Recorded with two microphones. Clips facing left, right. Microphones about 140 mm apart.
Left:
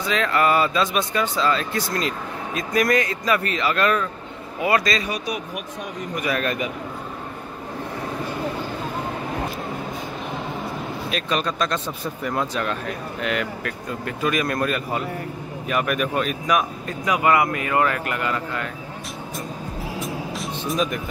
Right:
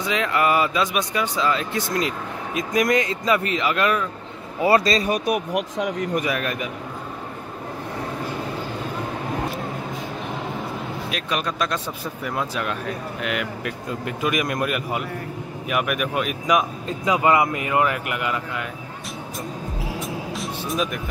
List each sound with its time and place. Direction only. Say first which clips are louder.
0.0 s speech: left 1 dB; 15° right (ahead or behind)
4.6 s speech: right 3 dB; 30° right (ahead or behind)
5.0 s speech: right 6 dB; 50° right (ahead or behind)
5.5 s speech: right 7 dB; 90° right
6.2 s speech: left 1 dB; 10° right (ahead or behind)
11.1 s speech: left 3 dB; 10° right (ahead or behind)
13.7 s speech: right 1 dB; 15° right (ahead or behind)
20.0 s music: even; centre (ahead or behind)